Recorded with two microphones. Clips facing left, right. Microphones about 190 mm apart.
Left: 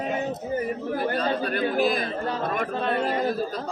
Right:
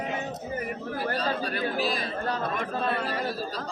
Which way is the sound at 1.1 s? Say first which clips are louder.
Left 4 dB; 50° left (ahead or behind).